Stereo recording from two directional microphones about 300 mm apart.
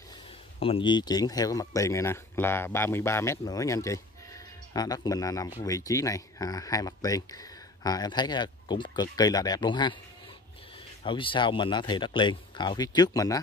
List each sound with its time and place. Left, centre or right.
0.6 s speech: centre
11.1 s speech: centre